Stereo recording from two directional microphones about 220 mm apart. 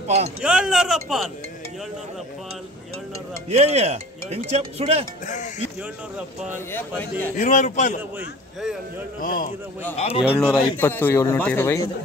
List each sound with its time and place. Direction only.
0.4 s speech: 5° right (ahead or behind)
3.4 s speech: 30° right (ahead or behind)
5.2 s a man's voice: 35° left (ahead or behind)
6.1 s speech: 5° right (ahead or behind)
7.0 s speech: 10° left (ahead or behind)
7.3 s a man's voice: 35° left (ahead or behind)
8.2 s speech: 5° right (ahead or behind)
9.2 s a man's voice: 40° left (ahead or behind)
9.9 s a man's voice: 25° left (ahead or behind)
10.4 s speech: 10° left (ahead or behind)